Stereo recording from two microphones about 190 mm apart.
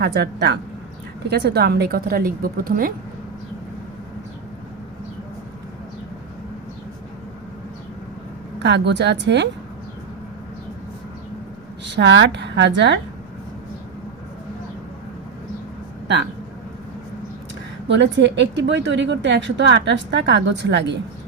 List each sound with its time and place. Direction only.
0.0 s a woman's voice: 60° right (ahead or behind)
8.5 s speech: 65° right (ahead or behind)
11.9 s a woman's voice: 70° right (ahead or behind)
17.8 s a woman's voice: 70° right (ahead or behind)